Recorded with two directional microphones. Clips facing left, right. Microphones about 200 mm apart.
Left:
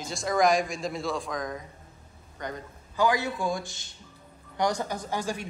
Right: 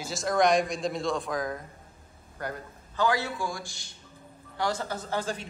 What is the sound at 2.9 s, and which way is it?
A man's voice, 15° left (ahead or behind).